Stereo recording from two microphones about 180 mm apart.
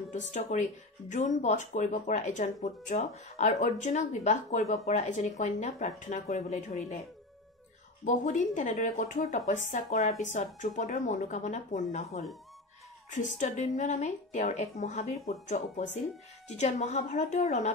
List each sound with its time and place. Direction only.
0.1 s speech: 40° left (ahead or behind)
8.0 s speech: 45° left (ahead or behind)